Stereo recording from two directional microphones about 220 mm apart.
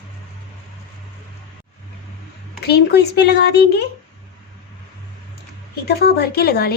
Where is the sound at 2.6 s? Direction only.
50° left (ahead or behind).